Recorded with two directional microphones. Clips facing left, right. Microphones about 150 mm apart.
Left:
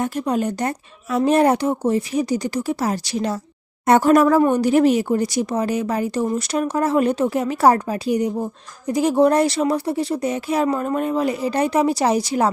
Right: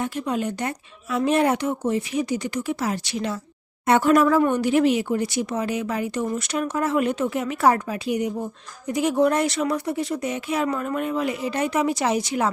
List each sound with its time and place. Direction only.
0.0 s speech: 40° left (ahead or behind)